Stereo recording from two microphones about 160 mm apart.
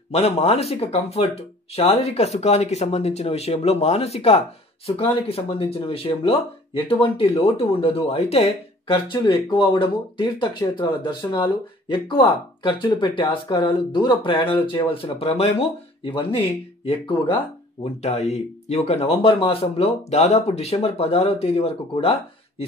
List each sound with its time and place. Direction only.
0.1 s speech: 40° left (ahead or behind)